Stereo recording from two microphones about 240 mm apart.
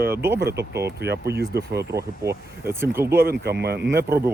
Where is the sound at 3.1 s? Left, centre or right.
Right.